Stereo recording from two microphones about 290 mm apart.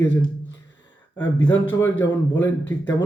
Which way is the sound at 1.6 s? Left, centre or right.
Centre.